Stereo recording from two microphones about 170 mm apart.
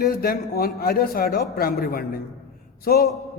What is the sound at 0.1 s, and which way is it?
A man's voice, 65° left (ahead or behind).